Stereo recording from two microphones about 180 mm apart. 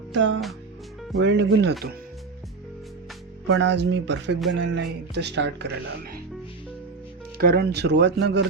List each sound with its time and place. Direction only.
0.2 s speech: 90° right
1.2 s speech: 80° right
3.5 s speech: 75° right (ahead or behind)
7.3 s speech: 60° right (ahead or behind)